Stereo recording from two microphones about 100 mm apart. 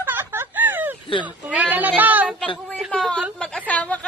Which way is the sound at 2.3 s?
10° left (ahead or behind).